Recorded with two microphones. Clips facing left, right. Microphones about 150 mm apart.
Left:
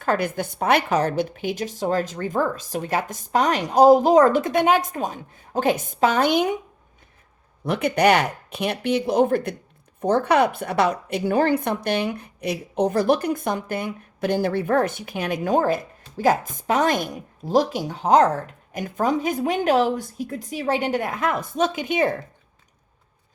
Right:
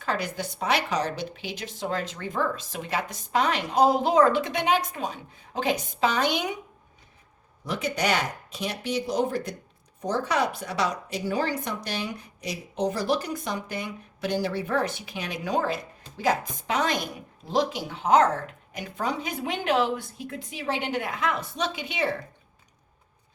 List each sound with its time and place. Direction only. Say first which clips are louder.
0.0 s a woman's voice: left 6 dB; 50° left (ahead or behind)
7.6 s a woman's voice: left 8 dB; 60° left (ahead or behind)